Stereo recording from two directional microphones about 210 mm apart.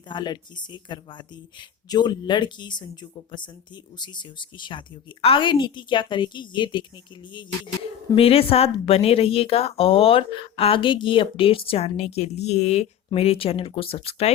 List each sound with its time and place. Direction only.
0.1 s a woman's voice: 20° left (ahead or behind)
8.1 s a woman's voice: 25° left (ahead or behind)